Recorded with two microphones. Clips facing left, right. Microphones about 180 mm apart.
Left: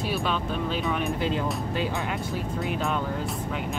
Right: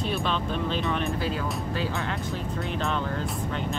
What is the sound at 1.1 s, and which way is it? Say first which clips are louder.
Speech: left 2 dB; 20° left (ahead or behind).